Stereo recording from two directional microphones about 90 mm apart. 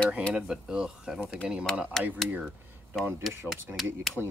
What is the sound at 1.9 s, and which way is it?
Speech, 5° left (ahead or behind).